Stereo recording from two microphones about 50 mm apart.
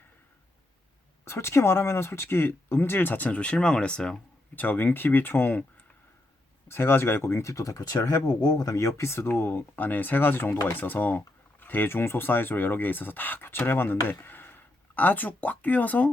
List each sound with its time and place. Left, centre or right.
1.2 s speech: left; by 4.2 s centre
4.5 s speech: left
6.7 s speech: left
8.6 s speech: left
9.0 s speech: left